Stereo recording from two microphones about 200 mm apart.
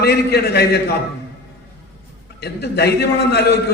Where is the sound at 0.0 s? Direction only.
55° left (ahead or behind).